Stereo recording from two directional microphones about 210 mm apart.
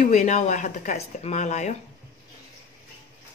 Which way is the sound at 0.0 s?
35° left (ahead or behind).